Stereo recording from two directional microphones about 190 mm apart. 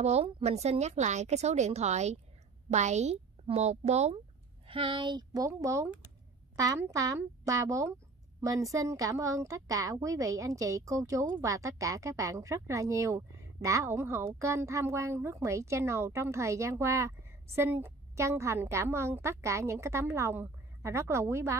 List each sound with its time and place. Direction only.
0.0 s a woman's voice: 35° right (ahead or behind); by 21.5 s 15° right (ahead or behind)